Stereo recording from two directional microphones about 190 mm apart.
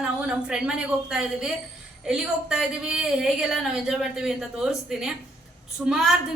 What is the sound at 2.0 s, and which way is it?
A woman's voice, 5° right (ahead or behind).